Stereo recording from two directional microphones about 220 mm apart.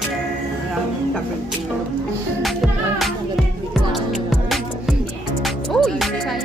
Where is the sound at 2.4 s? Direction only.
Centre (ahead or behind).